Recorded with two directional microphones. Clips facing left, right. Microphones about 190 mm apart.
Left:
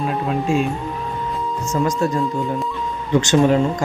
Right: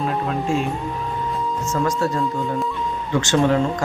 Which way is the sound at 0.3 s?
15° left (ahead or behind).